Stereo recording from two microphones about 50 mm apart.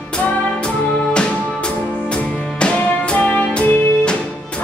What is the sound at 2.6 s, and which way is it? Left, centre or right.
Music, left.